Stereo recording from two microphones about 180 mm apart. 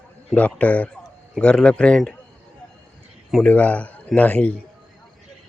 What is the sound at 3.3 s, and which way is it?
A man's voice, 10° left (ahead or behind).